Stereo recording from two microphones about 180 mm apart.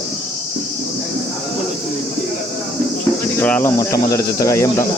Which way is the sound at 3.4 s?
10° left (ahead or behind).